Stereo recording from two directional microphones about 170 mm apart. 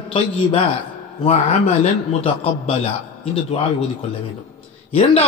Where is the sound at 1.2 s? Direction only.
40° left (ahead or behind).